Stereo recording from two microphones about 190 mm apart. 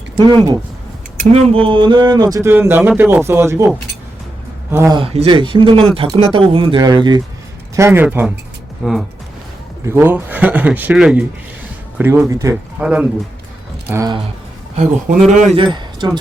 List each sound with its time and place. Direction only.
0.2 s speech: 25° right (ahead or behind)
1.2 s speech: 35° right (ahead or behind); by 3.7 s 15° right (ahead or behind)
4.7 s speech: 15° right (ahead or behind)
4.9 s speech: 30° right (ahead or behind)
7.8 s speech: 10° right (ahead or behind)
9.8 s speech: 10° right (ahead or behind)
12.8 s speech: 5° right (ahead or behind)
13.9 s speech: 20° right (ahead or behind)
14.8 s speech: 45° right (ahead or behind)
15.5 s speech: 25° right (ahead or behind)